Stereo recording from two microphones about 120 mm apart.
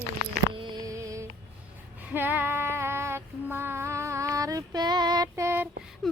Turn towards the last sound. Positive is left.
turn(degrees=-35)  # may be behind; listen again after turning